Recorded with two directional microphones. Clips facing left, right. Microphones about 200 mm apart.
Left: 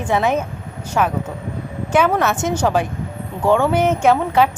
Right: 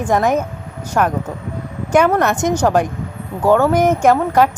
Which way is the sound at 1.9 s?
10° right (ahead or behind).